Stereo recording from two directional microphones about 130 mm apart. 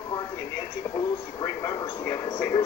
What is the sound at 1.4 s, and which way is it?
Speech, 30° left (ahead or behind).